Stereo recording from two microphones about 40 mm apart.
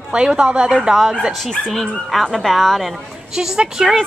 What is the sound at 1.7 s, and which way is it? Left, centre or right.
Speech, centre.